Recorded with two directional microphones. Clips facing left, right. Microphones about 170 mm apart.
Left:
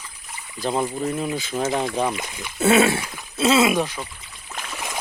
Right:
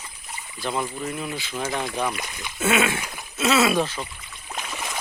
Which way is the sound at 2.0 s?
20° left (ahead or behind).